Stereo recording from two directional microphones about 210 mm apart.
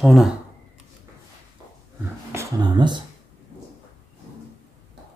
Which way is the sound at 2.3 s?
20° right (ahead or behind).